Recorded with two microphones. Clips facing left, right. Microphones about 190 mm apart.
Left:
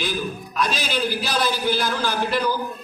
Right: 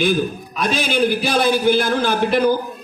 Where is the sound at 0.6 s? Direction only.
55° right (ahead or behind).